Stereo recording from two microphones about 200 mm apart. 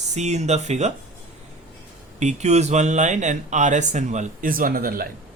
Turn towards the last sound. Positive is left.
turn(degrees=-45)  # may be behind; listen again after turning